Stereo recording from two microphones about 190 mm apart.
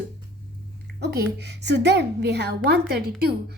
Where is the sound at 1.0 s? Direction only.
60° right (ahead or behind).